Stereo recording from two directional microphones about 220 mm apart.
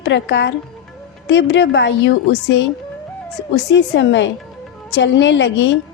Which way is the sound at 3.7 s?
55° left (ahead or behind).